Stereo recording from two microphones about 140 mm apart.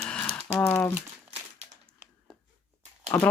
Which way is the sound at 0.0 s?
10° left (ahead or behind).